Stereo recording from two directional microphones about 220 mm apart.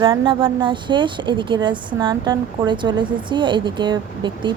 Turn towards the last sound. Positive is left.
turn(degrees=-20)  # may be behind; listen again after turning